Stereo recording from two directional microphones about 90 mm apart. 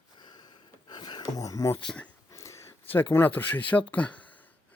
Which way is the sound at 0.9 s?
55° left (ahead or behind).